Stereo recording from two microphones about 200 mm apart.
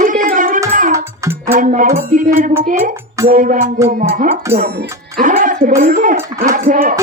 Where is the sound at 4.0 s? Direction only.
30° right (ahead or behind).